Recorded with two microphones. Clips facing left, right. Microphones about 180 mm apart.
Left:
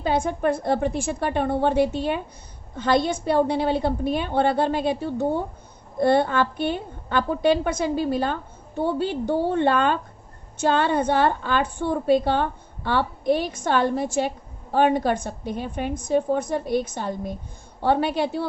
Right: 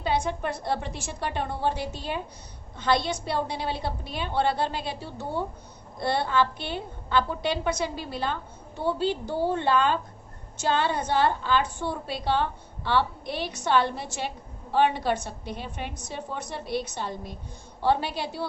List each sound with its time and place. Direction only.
0.0 s a woman's voice: 50° left (ahead or behind)